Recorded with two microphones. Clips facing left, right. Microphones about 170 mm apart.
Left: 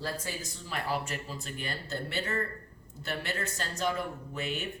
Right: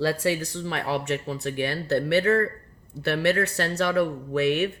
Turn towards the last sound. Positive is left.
turn(degrees=-70)  # may be behind; listen again after turning